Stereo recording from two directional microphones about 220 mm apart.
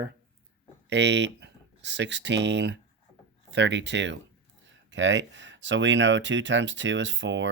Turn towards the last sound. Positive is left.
turn(degrees=-55)  # may be behind; listen again after turning